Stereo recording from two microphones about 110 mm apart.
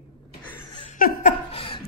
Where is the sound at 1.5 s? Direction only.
55° left (ahead or behind).